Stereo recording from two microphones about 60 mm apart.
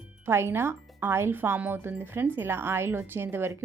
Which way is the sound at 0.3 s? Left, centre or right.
Right.